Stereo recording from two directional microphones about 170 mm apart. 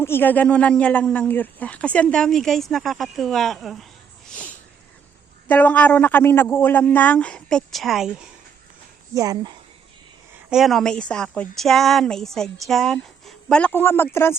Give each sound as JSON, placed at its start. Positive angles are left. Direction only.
{"t": 0.0, "sound": "speech", "side_deg": 15}
{"t": 4.3, "sound": "sniff", "side_deg": 10}
{"t": 5.5, "sound": "a man's voice", "side_deg": 10}
{"t": 9.1, "sound": "speech", "side_deg": -20}
{"t": 10.5, "sound": "speech", "side_deg": 0}